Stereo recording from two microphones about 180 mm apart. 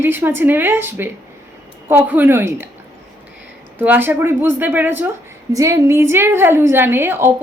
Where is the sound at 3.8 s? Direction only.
10° right (ahead or behind).